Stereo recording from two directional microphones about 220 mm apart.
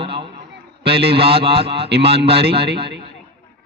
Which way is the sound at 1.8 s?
50° right (ahead or behind).